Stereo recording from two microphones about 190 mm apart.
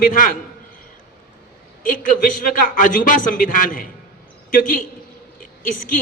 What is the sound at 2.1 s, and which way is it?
A man's voice, 45° left (ahead or behind).